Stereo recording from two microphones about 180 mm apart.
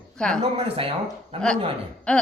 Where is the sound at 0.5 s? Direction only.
30° right (ahead or behind).